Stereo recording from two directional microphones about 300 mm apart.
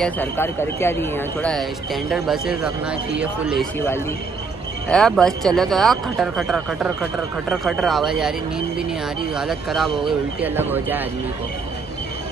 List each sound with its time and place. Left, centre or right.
0.0 s speech: centre
4.8 s speech: centre